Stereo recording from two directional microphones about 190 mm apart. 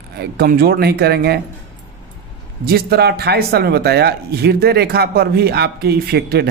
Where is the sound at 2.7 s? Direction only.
55° right (ahead or behind).